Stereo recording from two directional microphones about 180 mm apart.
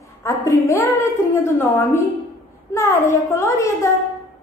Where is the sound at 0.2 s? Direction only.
15° left (ahead or behind).